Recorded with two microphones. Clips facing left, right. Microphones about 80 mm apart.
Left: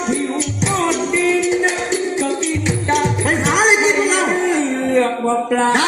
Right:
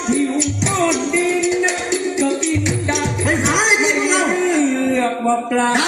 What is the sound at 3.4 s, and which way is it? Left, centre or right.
Music, left.